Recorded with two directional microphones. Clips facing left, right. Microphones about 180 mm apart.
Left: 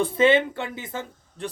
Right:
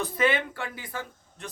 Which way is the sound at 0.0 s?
25° left (ahead or behind).